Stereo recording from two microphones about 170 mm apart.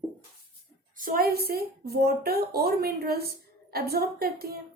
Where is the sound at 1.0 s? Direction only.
55° right (ahead or behind).